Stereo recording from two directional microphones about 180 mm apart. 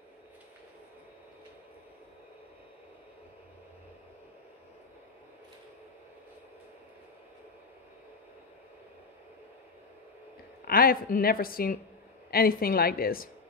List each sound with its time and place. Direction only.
10.7 s a woman's voice: 55° left (ahead or behind)